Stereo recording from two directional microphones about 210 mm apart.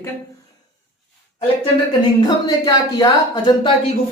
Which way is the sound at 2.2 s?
20° left (ahead or behind).